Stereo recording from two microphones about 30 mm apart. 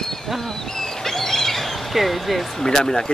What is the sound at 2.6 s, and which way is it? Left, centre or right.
Speech, left.